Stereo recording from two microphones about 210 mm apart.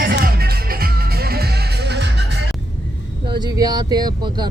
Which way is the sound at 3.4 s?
20° right (ahead or behind).